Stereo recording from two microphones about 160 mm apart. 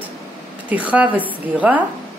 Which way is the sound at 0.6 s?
10° right (ahead or behind).